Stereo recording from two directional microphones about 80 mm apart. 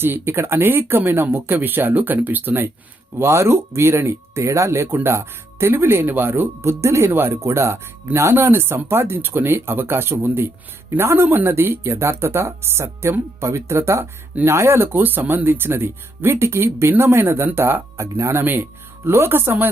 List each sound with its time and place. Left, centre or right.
0.0 s speech: right
3.2 s speech: right
18.4 s speech: right